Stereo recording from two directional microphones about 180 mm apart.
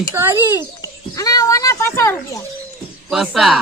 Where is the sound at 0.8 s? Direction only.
20° left (ahead or behind).